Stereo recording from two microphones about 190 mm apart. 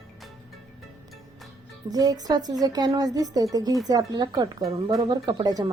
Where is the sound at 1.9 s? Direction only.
20° right (ahead or behind).